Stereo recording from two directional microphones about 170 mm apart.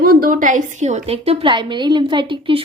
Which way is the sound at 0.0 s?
60° right (ahead or behind).